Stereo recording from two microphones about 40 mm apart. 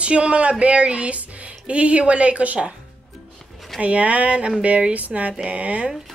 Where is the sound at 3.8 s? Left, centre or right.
Right.